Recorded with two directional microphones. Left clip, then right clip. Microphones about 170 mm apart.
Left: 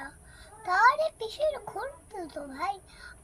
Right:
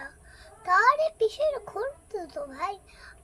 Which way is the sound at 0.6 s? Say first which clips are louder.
Right 2 dB; 20° right (ahead or behind).